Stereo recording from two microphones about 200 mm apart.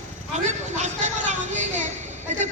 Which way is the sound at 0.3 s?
35° right (ahead or behind).